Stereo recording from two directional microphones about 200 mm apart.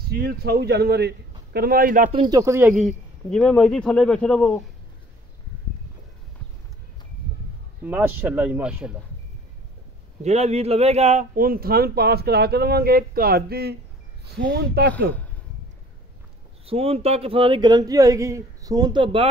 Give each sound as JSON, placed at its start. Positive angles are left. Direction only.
{"t": 0.1, "sound": "speech", "side_deg": -50}
{"t": 2.1, "sound": "speech", "side_deg": -20}
{"t": 2.7, "sound": "a man's voice", "side_deg": 0}
{"t": 7.8, "sound": "speech", "side_deg": -10}
{"t": 10.2, "sound": "speech", "side_deg": -35}
{"t": 16.6, "sound": "a man's voice", "side_deg": -30}